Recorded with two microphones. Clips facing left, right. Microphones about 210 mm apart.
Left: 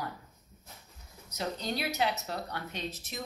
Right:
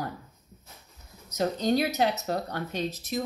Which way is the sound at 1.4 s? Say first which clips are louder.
Right 9 dB; 45° right (ahead or behind).